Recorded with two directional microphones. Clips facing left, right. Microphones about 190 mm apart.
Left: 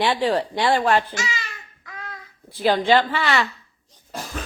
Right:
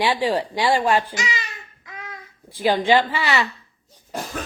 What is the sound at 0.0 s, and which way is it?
A child's voice, 10° right (ahead or behind).